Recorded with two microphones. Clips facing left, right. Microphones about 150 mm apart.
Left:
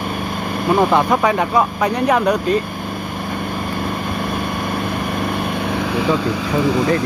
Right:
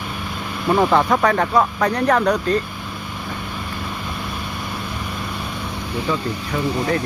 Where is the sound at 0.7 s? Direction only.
15° left (ahead or behind).